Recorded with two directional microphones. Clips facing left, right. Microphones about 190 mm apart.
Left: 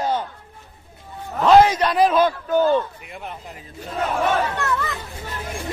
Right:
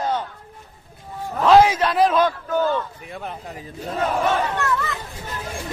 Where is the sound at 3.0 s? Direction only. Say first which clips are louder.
Right 2 dB; 35° right (ahead or behind).